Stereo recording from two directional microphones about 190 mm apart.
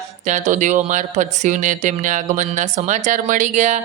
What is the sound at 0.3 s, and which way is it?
Speech, 40° right (ahead or behind).